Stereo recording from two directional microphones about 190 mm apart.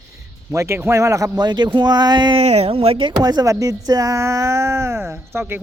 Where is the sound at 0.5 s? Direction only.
15° right (ahead or behind).